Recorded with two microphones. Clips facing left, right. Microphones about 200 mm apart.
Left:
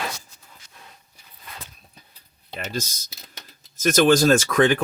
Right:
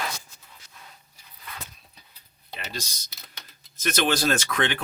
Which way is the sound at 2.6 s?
45° left (ahead or behind).